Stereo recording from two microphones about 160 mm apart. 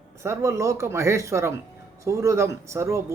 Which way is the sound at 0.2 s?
20° right (ahead or behind).